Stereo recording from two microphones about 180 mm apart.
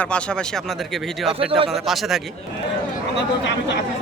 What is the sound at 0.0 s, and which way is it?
Speech, 5° left (ahead or behind).